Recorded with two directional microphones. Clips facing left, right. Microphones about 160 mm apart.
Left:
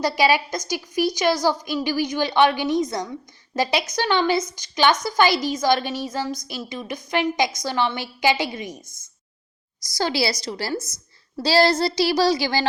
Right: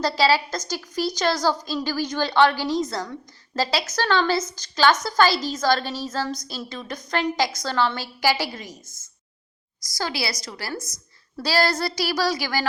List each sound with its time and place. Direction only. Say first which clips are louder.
0.0 s a woman's voice: left 1 dB; 15° left (ahead or behind)
10.0 s a woman's voice: left 5 dB; 25° left (ahead or behind)